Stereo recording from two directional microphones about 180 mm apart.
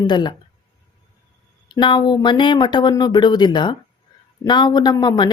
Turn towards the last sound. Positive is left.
turn(degrees=25)  # may be behind; listen again after turning